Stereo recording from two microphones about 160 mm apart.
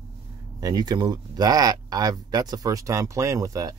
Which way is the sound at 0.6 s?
25° right (ahead or behind).